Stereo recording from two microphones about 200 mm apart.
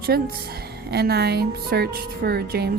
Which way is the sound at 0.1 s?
50° right (ahead or behind).